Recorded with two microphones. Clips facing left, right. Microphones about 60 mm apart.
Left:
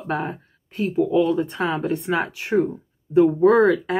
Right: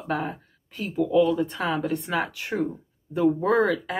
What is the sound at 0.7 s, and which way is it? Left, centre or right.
Speech, left.